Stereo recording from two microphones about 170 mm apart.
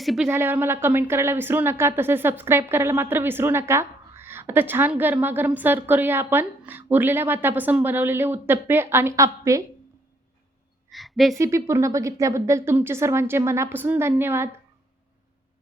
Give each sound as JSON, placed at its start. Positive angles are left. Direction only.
{"t": 0.0, "sound": "a woman's voice", "side_deg": 0}
{"t": 0.3, "sound": "a woman's voice", "side_deg": -15}
{"t": 10.8, "sound": "a sound", "side_deg": 0}
{"t": 11.3, "sound": "a woman's voice", "side_deg": -15}